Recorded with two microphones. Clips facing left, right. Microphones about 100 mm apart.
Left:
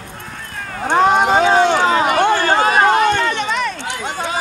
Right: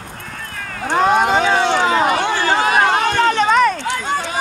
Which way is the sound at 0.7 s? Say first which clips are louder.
Left 2 dB; 30° left (ahead or behind).